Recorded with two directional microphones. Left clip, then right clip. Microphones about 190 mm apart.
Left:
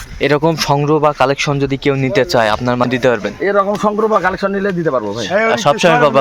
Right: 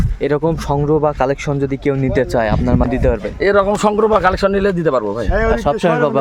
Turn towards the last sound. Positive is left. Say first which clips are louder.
# left 4 dB
turn(degrees=0)  # may be behind; listen again after turning